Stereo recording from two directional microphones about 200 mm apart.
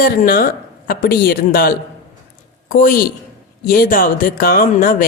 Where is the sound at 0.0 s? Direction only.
45° left (ahead or behind).